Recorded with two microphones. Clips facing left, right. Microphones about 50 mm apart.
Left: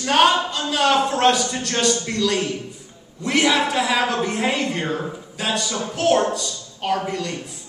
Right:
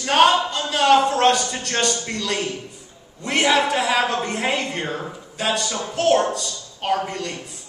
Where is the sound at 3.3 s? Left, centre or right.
Right.